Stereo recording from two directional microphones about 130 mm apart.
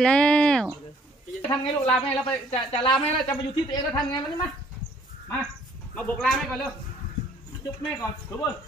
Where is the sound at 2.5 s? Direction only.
45° left (ahead or behind).